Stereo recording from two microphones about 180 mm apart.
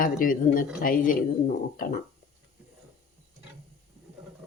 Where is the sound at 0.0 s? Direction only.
50° left (ahead or behind).